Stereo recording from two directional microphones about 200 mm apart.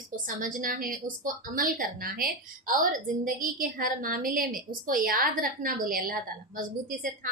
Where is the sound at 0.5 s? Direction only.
45° right (ahead or behind).